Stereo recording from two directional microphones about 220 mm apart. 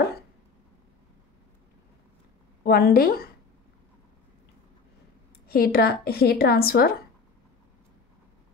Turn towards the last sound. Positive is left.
turn(degrees=45)  # may be behind; listen again after turning